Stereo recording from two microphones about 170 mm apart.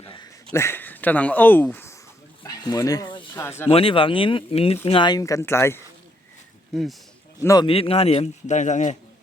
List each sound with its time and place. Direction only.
0.0 s a sound: 30° left (ahead or behind)
0.5 s speech: 15° left (ahead or behind)
2.4 s a sound: 20° left (ahead or behind)
3.7 s a man's voice: 35° left (ahead or behind); by 5.8 s 15° left (ahead or behind)
7.3 s speech: 20° left (ahead or behind)
7.7 s a man's voice: 35° left (ahead or behind)